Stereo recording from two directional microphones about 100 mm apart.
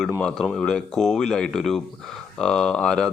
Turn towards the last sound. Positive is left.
turn(degrees=10)  # may be behind; listen again after turning